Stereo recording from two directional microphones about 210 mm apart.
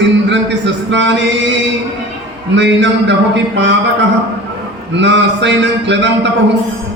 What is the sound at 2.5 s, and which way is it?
Speech, 55° right (ahead or behind).